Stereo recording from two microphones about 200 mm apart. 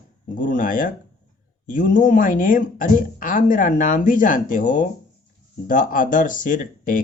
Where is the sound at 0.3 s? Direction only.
40° left (ahead or behind).